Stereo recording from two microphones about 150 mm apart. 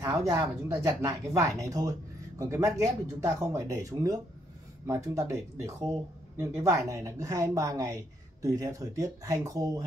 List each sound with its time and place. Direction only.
0.0 s speech: 20° right (ahead or behind)